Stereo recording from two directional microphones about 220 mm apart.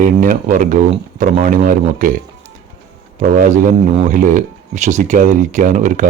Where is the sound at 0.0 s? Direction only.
40° right (ahead or behind).